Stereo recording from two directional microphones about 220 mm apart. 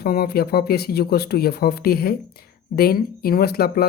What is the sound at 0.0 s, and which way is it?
Speech, 45° left (ahead or behind).